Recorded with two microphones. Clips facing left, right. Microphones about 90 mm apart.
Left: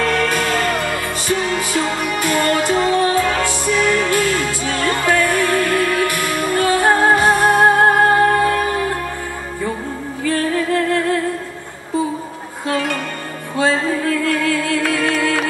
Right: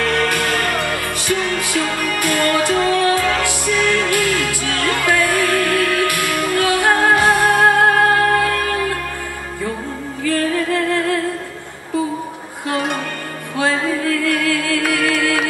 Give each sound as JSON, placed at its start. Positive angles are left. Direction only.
{"t": 0.0, "sound": "music", "side_deg": 20}
{"t": 10.2, "sound": "music", "side_deg": 20}
{"t": 12.6, "sound": "music", "side_deg": -20}
{"t": 13.6, "sound": "music", "side_deg": 20}